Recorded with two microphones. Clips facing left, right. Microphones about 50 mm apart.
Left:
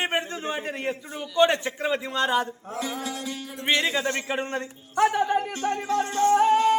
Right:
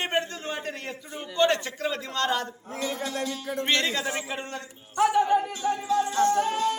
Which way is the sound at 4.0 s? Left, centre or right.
Centre.